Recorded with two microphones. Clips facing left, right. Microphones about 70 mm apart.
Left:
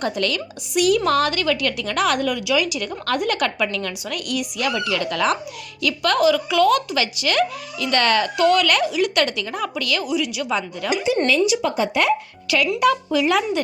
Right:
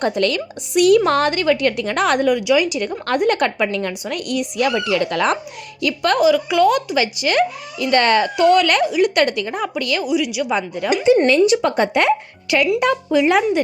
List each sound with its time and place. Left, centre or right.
0.0 s a woman's voice: right
2.2 s a woman's voice: right
5.8 s speech: right
10.0 s a woman's voice: centre
10.5 s speech: right
11.3 s a woman's voice: right
12.5 s speech: right